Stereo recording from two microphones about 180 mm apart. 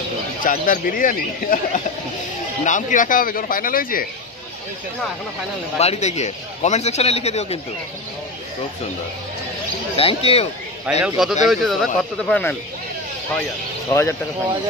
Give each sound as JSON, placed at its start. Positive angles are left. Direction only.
{"t": 0.4, "sound": "speech", "side_deg": 50}
{"t": 5.8, "sound": "speech", "side_deg": 35}
{"t": 9.9, "sound": "speech", "side_deg": 35}
{"t": 11.0, "sound": "speech", "side_deg": 0}
{"t": 13.8, "sound": "speech", "side_deg": 15}